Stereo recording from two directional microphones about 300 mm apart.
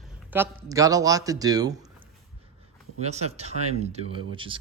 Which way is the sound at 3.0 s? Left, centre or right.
Right.